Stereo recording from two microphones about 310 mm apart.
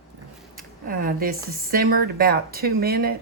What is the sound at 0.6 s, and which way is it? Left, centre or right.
Speech, right.